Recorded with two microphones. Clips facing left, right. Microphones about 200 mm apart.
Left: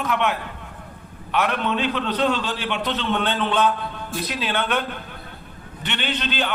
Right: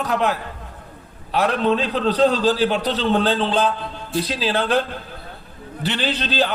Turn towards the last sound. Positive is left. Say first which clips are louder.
# right 4 dB
turn(degrees=-35)  # may be behind; listen again after turning